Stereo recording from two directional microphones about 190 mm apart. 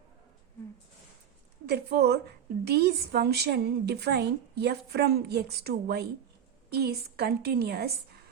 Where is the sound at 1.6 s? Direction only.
60° right (ahead or behind).